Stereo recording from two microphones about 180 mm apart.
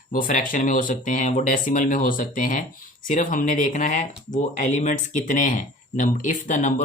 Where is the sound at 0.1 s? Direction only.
50° left (ahead or behind).